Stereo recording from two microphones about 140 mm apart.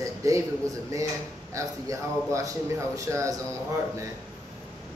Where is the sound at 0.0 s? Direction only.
20° right (ahead or behind).